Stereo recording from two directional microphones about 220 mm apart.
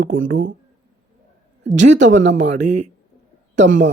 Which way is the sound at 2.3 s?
30° right (ahead or behind).